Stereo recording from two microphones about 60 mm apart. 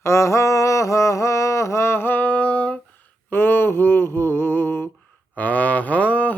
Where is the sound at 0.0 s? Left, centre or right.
Left.